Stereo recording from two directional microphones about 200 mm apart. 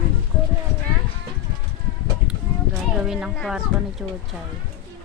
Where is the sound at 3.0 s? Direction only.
Centre (ahead or behind).